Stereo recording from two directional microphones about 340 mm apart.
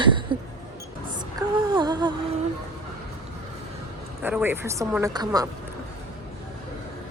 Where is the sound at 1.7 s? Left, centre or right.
Centre.